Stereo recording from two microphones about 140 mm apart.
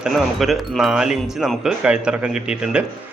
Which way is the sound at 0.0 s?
Centre (ahead or behind).